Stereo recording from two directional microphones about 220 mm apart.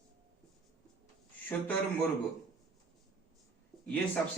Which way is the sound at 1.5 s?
5° left (ahead or behind).